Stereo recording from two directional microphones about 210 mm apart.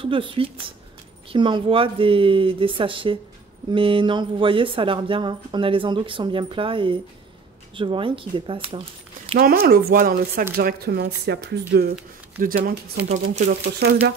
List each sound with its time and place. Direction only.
0.0 s speech: 25° right (ahead or behind)
9.4 s speech: 45° right (ahead or behind)